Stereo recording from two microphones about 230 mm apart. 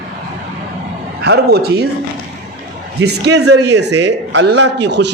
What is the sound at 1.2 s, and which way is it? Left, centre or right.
Speech, right.